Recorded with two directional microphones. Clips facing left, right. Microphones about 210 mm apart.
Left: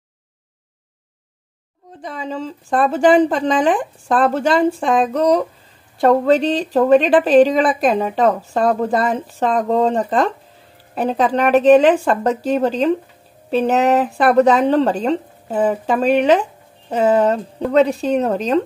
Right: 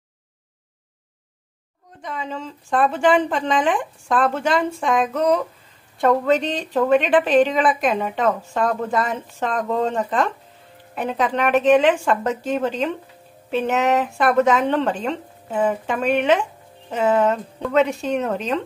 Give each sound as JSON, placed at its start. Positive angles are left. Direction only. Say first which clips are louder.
{"t": 2.0, "sound": "speech", "louder": "left 4 dB", "side_deg": 35}